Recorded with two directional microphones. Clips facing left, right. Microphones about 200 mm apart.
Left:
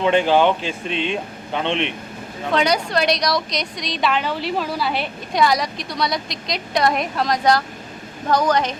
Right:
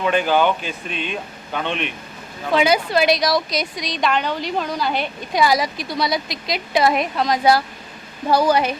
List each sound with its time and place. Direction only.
0.0 s speech: 25° left (ahead or behind)
2.5 s a woman's voice: 5° right (ahead or behind)